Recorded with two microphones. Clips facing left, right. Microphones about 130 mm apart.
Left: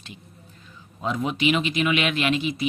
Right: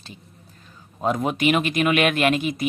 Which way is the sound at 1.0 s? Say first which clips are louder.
Right 3 dB; 45° right (ahead or behind).